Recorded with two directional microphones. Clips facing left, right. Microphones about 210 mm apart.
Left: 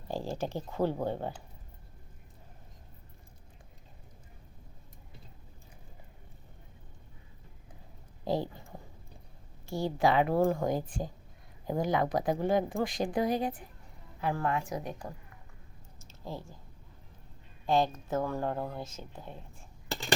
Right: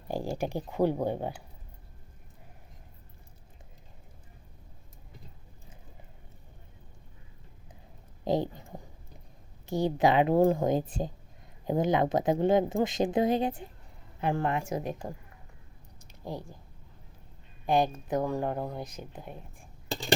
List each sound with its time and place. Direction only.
0.1 s speech: 15° right (ahead or behind)
8.2 s speech: 20° right (ahead or behind)
16.2 s speech: 15° right (ahead or behind)
17.7 s speech: 15° right (ahead or behind)